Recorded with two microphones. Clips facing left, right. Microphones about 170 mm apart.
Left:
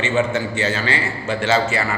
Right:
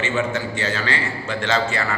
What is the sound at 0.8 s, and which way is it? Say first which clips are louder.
A man's voice: left 3 dB; 15° left (ahead or behind).